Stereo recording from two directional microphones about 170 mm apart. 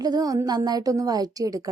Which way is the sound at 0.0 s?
20° right (ahead or behind).